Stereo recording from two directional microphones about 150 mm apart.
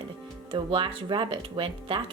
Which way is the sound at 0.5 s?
35° right (ahead or behind).